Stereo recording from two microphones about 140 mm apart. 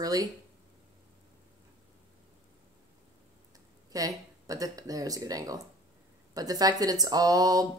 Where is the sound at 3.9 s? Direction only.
25° right (ahead or behind).